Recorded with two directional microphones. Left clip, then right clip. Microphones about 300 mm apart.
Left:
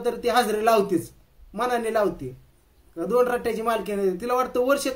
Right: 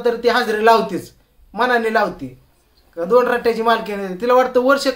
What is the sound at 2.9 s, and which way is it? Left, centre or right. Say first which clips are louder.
Speech: right 7 dB; right.